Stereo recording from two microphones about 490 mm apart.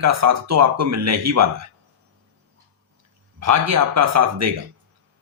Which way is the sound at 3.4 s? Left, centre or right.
Right.